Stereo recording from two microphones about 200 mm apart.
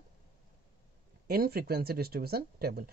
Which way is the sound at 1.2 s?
50° right (ahead or behind).